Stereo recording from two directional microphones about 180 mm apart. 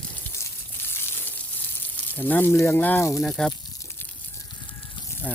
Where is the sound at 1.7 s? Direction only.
10° left (ahead or behind).